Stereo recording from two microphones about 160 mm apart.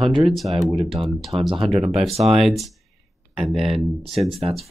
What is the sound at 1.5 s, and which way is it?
Speech, 35° right (ahead or behind).